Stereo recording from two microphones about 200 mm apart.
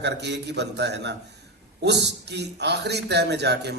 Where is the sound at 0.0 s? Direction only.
60° right (ahead or behind).